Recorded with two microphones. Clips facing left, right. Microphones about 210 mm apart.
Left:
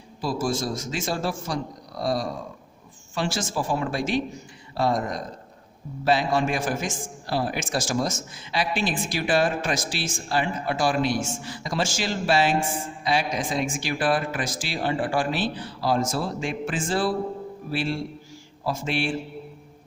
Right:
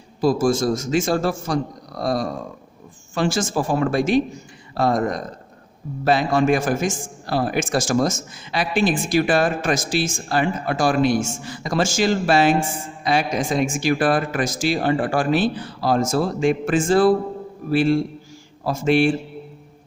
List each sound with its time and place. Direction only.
0.2 s a man's voice: 45° right (ahead or behind)